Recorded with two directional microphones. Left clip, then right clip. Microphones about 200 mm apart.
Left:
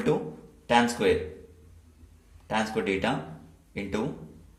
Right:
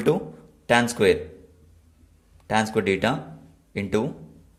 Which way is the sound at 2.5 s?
50° right (ahead or behind).